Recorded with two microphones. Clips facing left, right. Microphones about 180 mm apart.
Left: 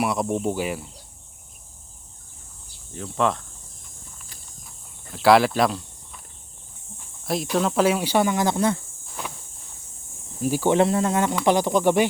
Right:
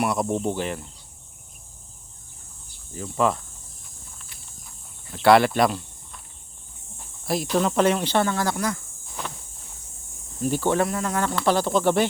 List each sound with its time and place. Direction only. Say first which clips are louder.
0.0 s speech: even; centre (ahead or behind)
2.9 s speech: even; 5° right (ahead or behind)
5.1 s speech: even; centre (ahead or behind)
7.5 s speech: even; centre (ahead or behind); by 8.8 s 25° left (ahead or behind)
10.4 s speech: left 2 dB; 10° left (ahead or behind)
10.8 s speech: left 4 dB; 25° left (ahead or behind)